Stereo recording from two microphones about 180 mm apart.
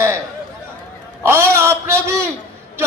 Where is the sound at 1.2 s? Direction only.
15° right (ahead or behind).